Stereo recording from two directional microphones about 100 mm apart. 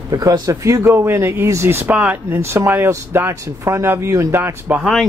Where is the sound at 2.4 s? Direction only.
25° right (ahead or behind).